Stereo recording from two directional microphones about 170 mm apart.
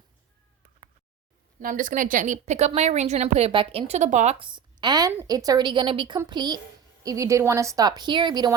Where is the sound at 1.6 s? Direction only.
50° right (ahead or behind).